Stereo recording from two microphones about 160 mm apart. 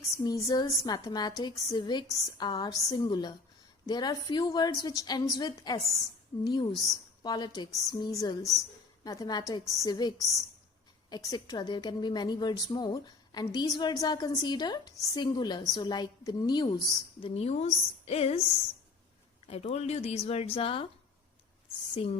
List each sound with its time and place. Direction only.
0.1 s a woman's voice: 20° left (ahead or behind); by 18.4 s 40° left (ahead or behind)
19.5 s speech: 40° left (ahead or behind)